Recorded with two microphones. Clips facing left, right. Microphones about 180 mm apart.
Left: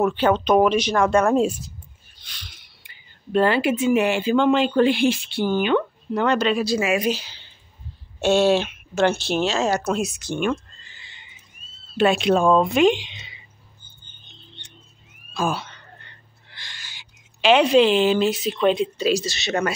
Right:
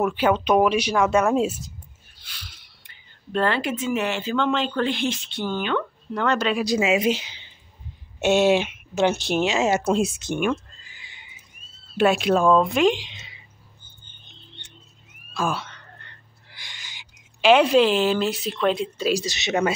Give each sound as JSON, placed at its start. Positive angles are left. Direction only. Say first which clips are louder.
{"t": 0.0, "sound": "speech", "louder": "left 2 dB", "side_deg": -10}
{"t": 6.3, "sound": "speech", "louder": "left 2 dB", "side_deg": -5}
{"t": 6.6, "sound": "speech", "louder": "right 1 dB", "side_deg": -20}
{"t": 10.3, "sound": "neigh", "louder": "left 2 dB", "side_deg": -10}
{"t": 12.0, "sound": "speech", "louder": "left 1 dB", "side_deg": -5}
{"t": 15.5, "sound": "whispering", "louder": "left 1 dB", "side_deg": 0}
{"t": 16.4, "sound": "a sound", "louder": "left 1 dB", "side_deg": -15}
{"t": 18.1, "sound": "speech", "louder": "left 3 dB", "side_deg": 20}
{"t": 18.7, "sound": "speech", "louder": "left 3 dB", "side_deg": 0}
{"t": 19.1, "sound": "speech", "louder": "even", "side_deg": -15}